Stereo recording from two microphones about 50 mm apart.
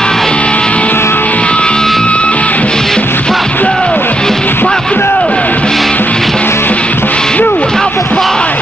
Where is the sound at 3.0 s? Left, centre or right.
Left.